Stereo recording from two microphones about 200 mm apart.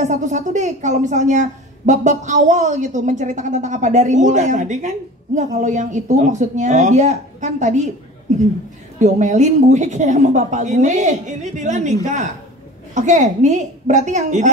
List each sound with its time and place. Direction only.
0.0 s a woman's voice: 35° right (ahead or behind)